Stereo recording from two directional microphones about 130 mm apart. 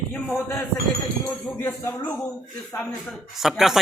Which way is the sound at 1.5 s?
20° left (ahead or behind).